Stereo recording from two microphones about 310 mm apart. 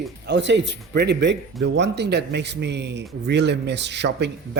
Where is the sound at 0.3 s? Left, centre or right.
Right.